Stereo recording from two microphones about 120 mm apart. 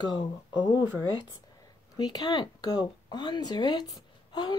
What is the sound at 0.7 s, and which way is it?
Speech, 15° right (ahead or behind).